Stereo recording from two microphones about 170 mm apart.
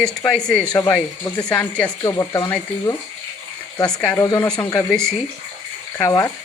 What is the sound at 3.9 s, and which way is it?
Speech, 10° left (ahead or behind).